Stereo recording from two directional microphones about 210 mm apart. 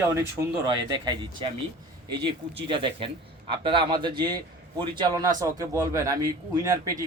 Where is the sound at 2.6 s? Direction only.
25° right (ahead or behind).